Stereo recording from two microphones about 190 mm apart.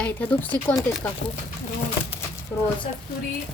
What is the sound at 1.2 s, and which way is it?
Speech, 60° left (ahead or behind).